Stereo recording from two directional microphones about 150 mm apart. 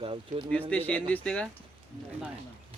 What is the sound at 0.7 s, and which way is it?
Speech, 10° left (ahead or behind).